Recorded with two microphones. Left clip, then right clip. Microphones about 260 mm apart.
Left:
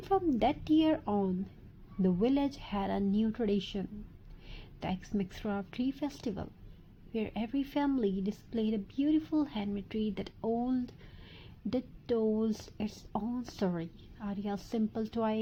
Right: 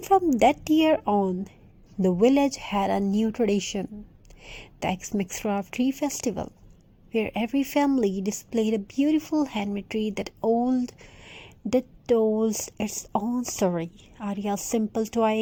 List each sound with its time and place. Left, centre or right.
0.0 s a woman's voice: right